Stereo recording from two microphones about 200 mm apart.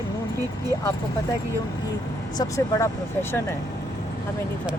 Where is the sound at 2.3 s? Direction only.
15° left (ahead or behind).